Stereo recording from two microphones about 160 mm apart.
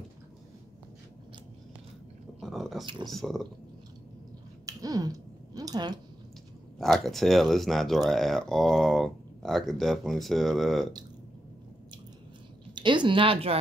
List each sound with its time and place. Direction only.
2.4 s a sound: centre (ahead or behind)
2.8 s speech: 30° right (ahead or behind)
3.1 s speech: centre (ahead or behind)
4.6 s a sound: 20° right (ahead or behind)
6.8 s speech: centre (ahead or behind)
12.7 s speech: 30° right (ahead or behind)